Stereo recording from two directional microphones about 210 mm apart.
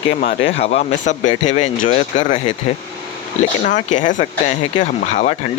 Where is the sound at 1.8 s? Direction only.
35° left (ahead or behind).